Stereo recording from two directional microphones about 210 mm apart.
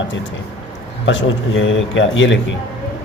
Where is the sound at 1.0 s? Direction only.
65° left (ahead or behind).